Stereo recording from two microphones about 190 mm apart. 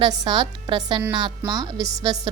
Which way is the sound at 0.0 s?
20° right (ahead or behind).